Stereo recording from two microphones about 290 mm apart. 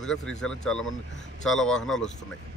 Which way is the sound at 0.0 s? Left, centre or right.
Centre.